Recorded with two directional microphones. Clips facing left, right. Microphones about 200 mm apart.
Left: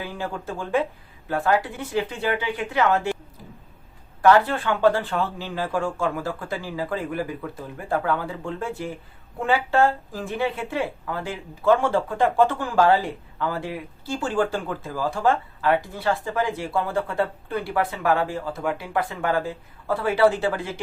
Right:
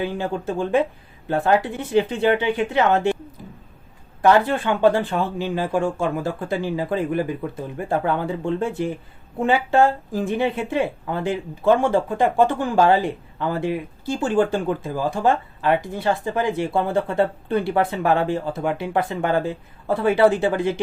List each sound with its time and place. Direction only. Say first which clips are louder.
0.0 s speech: right 6 dB; 20° right (ahead or behind)
4.2 s speech: right 1 dB; 20° right (ahead or behind)